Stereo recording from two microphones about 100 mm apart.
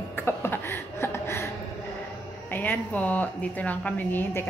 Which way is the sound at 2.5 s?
20° left (ahead or behind).